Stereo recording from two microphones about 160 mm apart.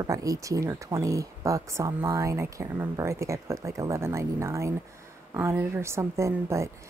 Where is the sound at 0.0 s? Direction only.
20° right (ahead or behind).